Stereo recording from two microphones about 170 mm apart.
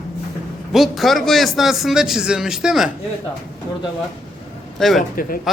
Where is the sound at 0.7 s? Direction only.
Centre (ahead or behind).